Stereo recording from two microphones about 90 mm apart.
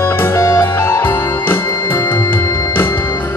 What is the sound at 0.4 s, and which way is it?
Music, 35° left (ahead or behind).